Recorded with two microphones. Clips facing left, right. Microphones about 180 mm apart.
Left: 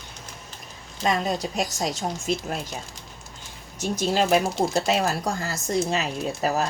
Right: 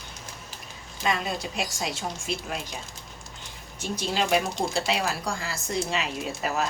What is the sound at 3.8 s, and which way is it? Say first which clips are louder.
Speech: left 5 dB; 45° left (ahead or behind).